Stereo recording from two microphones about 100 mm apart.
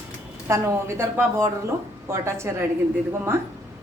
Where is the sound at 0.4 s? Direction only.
25° right (ahead or behind).